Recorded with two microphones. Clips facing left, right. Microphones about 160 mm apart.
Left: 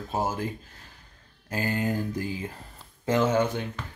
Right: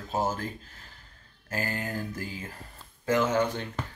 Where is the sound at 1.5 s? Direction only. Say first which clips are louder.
Left 5 dB; 20° left (ahead or behind).